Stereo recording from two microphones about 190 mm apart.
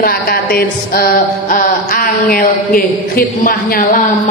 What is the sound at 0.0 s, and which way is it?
A man's voice, 55° left (ahead or behind).